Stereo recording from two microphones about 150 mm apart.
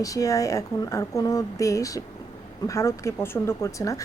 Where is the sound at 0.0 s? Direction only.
20° left (ahead or behind).